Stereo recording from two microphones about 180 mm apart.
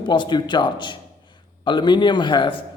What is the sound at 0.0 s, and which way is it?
A man's voice, 25° left (ahead or behind).